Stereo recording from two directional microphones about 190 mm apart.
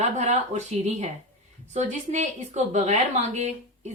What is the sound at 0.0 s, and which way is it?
A woman's voice, 40° right (ahead or behind).